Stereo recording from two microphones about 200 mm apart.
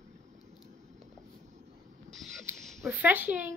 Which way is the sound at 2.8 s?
10° right (ahead or behind).